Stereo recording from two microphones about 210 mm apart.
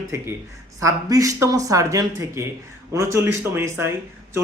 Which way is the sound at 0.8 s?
15° right (ahead or behind).